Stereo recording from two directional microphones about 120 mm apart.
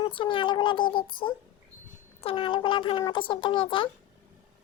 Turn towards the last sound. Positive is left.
turn(degrees=45)  # may be behind; listen again after turning